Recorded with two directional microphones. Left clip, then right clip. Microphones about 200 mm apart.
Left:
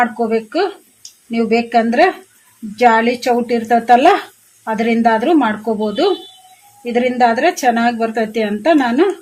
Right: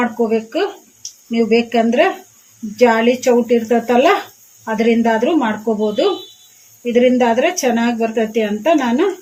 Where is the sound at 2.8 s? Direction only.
55° left (ahead or behind).